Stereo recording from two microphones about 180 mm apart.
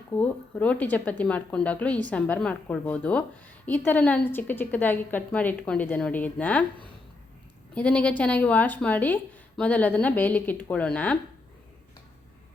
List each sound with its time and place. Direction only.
0.1 s speech: 10° left (ahead or behind)
7.8 s speech: 5° left (ahead or behind)